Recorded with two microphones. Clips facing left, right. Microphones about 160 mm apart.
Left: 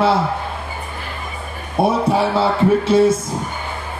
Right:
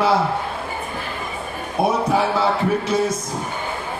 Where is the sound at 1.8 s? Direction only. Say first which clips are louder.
Left 3 dB; 30° left (ahead or behind).